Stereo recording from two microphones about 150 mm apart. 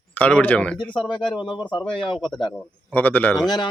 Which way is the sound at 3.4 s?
25° left (ahead or behind).